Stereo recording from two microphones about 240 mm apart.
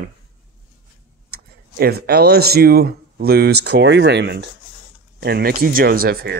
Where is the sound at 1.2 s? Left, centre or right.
Right.